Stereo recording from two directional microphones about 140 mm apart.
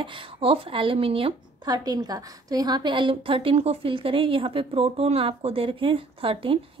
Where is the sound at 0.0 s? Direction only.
35° right (ahead or behind).